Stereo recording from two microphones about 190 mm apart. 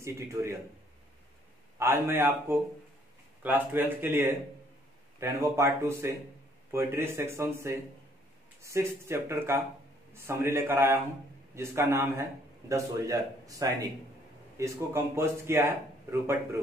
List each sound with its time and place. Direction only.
0.0 s a man's voice: 15° right (ahead or behind)
1.8 s a man's voice: 10° right (ahead or behind)